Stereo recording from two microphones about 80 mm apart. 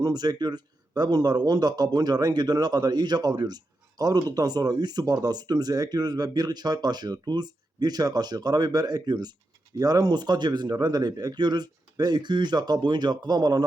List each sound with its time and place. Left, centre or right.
0.0 s speech: right